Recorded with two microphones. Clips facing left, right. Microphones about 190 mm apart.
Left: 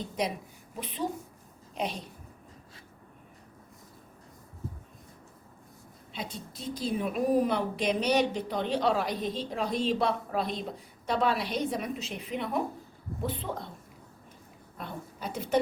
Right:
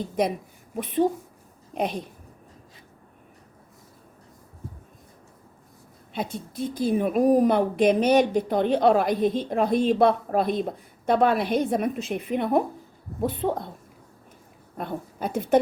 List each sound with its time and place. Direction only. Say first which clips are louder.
1.7 s a woman's voice: right 6 dB; 55° right (ahead or behind)
6.1 s a woman's voice: right 9 dB; 55° right (ahead or behind)
14.8 s a woman's voice: right 9 dB; 55° right (ahead or behind)